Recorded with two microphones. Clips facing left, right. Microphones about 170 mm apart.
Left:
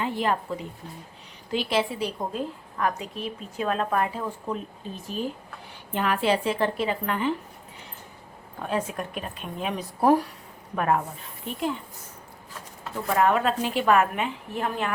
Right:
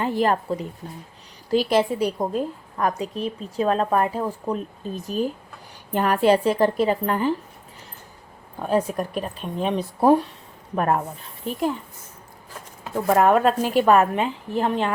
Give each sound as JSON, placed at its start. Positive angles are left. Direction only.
{"t": 0.0, "sound": "a woman's voice", "side_deg": -40}
{"t": 8.6, "sound": "a woman's voice", "side_deg": -40}
{"t": 10.8, "sound": "a woman's voice", "side_deg": -40}
{"t": 13.1, "sound": "a woman's voice", "side_deg": -45}